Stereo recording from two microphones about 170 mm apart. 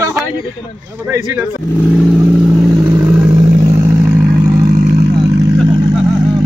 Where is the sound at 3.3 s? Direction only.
30° right (ahead or behind).